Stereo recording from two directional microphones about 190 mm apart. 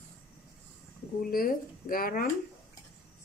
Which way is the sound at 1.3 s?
50° left (ahead or behind).